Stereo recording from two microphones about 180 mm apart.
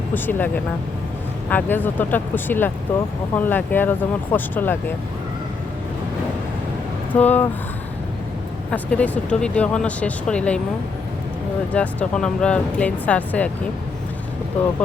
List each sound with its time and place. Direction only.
0.1 s speech: 10° left (ahead or behind)
7.1 s speech: 10° left (ahead or behind)
8.7 s speech: 10° left (ahead or behind)
11.7 s speech: 5° left (ahead or behind)